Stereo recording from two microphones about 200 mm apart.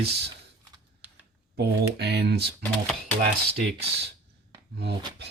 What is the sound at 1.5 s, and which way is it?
Speech, 55° right (ahead or behind).